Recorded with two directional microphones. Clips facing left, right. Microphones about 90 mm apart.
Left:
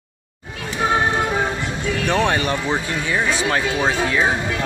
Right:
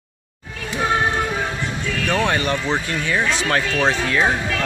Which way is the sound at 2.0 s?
20° left (ahead or behind).